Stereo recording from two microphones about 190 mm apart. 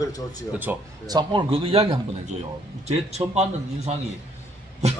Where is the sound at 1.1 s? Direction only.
25° right (ahead or behind).